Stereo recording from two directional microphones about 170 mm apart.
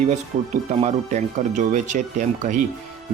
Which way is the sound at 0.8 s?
40° right (ahead or behind).